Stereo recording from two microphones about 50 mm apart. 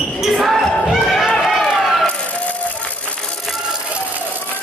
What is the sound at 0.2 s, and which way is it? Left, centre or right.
Basketball bounce, centre.